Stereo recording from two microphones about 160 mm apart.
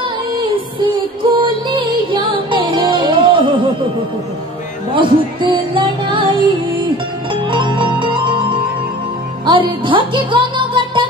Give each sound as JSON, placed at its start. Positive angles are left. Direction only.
{"t": 0.4, "sound": "music", "side_deg": -30}
{"t": 4.9, "sound": "music", "side_deg": -30}
{"t": 7.5, "sound": "music", "side_deg": -30}
{"t": 9.5, "sound": "music", "side_deg": -30}